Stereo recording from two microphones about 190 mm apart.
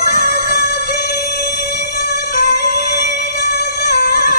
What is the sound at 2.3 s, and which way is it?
Music, 50° left (ahead or behind).